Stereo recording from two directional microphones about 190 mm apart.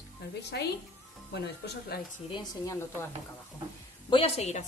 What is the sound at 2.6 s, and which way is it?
Speech, 15° left (ahead or behind).